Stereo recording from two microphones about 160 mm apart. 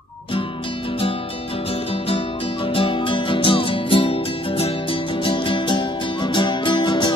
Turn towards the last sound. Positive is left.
turn(degrees=30)  # may be behind; listen again after turning